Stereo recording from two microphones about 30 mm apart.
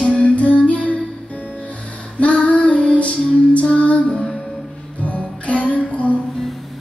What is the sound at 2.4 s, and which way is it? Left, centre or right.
Child singing, left.